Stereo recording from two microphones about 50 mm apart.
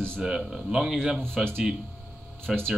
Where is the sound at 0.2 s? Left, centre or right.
Centre.